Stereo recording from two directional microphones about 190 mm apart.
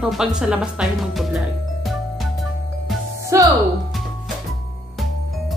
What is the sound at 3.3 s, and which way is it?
Speech, 15° right (ahead or behind).